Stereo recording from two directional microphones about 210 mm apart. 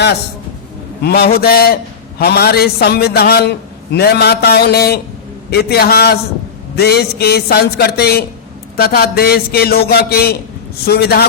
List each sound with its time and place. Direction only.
1.0 s a man's voice: 50° left (ahead or behind)